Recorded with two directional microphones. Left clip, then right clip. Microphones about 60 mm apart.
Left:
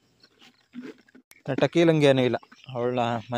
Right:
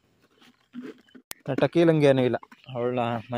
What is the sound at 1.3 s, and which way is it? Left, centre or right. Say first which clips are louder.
Speech: even; centre.